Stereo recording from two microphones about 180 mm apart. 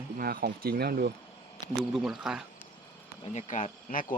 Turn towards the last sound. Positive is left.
turn(degrees=45)  # may be behind; listen again after turning